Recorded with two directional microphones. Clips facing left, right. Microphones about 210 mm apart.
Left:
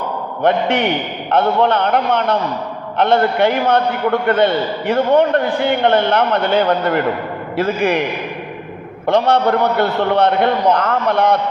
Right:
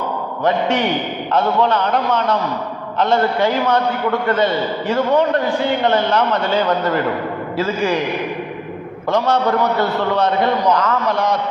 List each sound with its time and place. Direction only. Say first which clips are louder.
0.4 s a man's voice: left 2 dB; 60° left (ahead or behind)
9.0 s a man's voice: left 3 dB; 60° left (ahead or behind)